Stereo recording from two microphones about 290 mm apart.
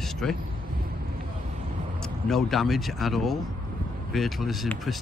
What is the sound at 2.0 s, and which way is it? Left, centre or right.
Speech, centre.